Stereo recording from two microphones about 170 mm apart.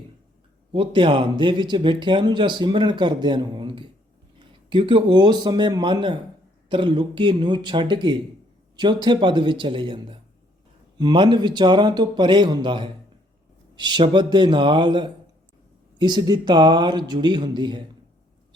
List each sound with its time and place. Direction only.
0.7 s speech: 30° right (ahead or behind)